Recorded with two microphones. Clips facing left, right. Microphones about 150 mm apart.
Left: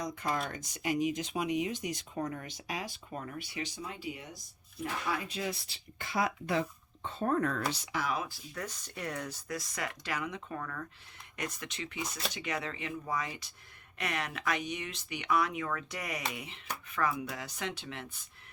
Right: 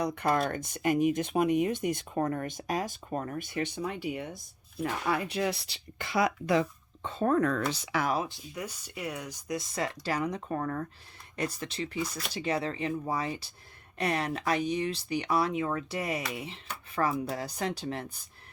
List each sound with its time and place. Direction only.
0.0 s speech: 65° right (ahead or behind); by 7.5 s 90° right
7.9 s speech: 70° right (ahead or behind)
8.5 s speech: 10° right (ahead or behind); by 18.2 s 40° right (ahead or behind)